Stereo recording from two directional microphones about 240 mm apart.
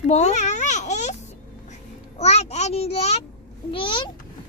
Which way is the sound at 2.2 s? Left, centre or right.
Left.